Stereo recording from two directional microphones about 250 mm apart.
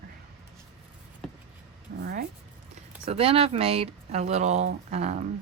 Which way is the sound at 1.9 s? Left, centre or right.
Right.